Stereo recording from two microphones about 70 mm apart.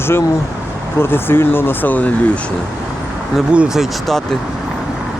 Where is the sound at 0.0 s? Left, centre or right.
Left.